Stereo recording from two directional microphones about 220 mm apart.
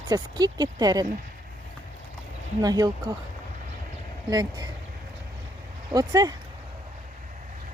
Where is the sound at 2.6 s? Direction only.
15° right (ahead or behind).